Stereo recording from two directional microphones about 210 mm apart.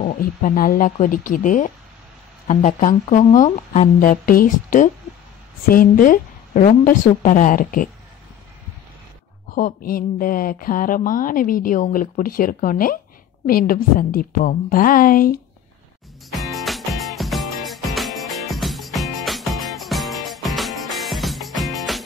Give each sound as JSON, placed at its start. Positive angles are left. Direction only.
{"t": 0.0, "sound": "speech", "side_deg": 40}
{"t": 9.5, "sound": "speech", "side_deg": 40}
{"t": 16.3, "sound": "music", "side_deg": 0}